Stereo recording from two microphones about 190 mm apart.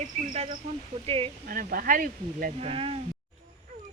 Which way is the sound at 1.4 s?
50° right (ahead or behind).